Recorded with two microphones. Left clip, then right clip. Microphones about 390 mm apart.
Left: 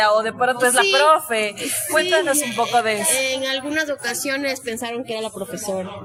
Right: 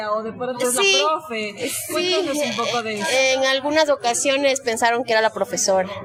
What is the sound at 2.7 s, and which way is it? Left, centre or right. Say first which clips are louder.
Speech: left 6 dB; left.